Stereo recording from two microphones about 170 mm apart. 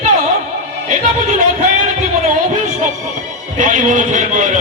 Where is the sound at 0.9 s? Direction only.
45° right (ahead or behind).